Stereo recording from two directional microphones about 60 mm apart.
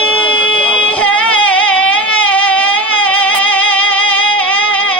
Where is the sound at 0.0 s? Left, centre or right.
Left.